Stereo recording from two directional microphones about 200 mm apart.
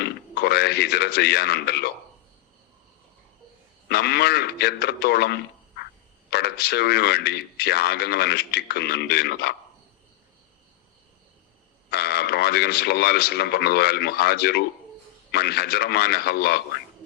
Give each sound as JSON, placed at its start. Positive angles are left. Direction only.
{"t": 0.0, "sound": "speech", "side_deg": 55}
{"t": 3.8, "sound": "speech", "side_deg": 55}
{"t": 11.9, "sound": "speech", "side_deg": 55}